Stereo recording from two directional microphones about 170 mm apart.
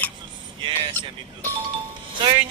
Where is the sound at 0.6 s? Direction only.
30° right (ahead or behind).